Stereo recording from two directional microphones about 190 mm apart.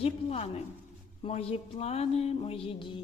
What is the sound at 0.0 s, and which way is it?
Music, 30° left (ahead or behind).